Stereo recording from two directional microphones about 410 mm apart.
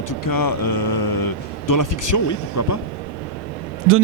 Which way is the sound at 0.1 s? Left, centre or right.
Left.